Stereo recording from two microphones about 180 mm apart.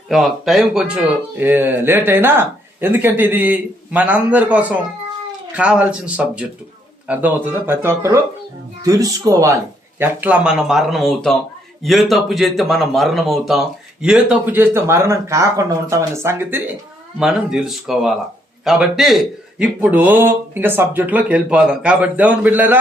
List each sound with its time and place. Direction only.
0.1 s a man's voice: centre (ahead or behind)